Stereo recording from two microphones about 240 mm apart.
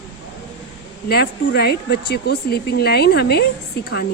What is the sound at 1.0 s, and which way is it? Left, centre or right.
Speech, left.